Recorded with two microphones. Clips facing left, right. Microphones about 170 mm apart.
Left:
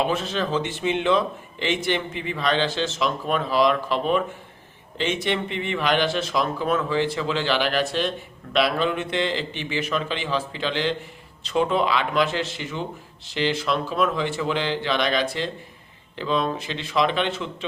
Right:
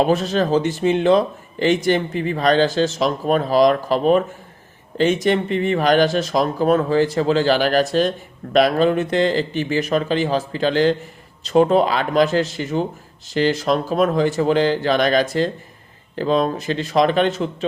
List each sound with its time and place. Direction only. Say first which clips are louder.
0.0 s speech: right 7 dB; 40° right (ahead or behind)